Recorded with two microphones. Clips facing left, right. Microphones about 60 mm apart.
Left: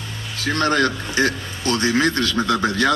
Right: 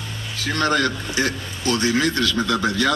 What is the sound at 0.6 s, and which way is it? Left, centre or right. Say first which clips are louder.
A man's voice: left 1 dB; left.